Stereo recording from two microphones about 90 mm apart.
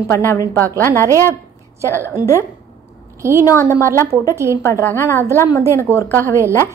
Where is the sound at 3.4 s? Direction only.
35° left (ahead or behind).